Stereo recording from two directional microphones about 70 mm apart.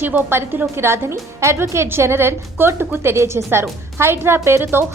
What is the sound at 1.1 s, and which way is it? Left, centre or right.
A woman's voice, right.